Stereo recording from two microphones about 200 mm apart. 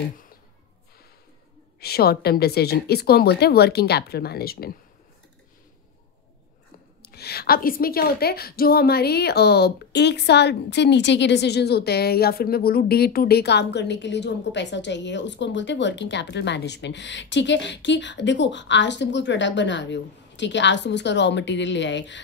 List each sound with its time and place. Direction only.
1.8 s a woman's voice: 50° left (ahead or behind)
7.0 s a woman's voice: 55° left (ahead or behind)